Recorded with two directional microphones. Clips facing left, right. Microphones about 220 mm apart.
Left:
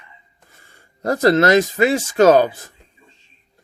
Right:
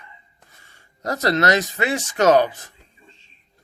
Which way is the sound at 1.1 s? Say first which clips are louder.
Left 6 dB; 30° left (ahead or behind).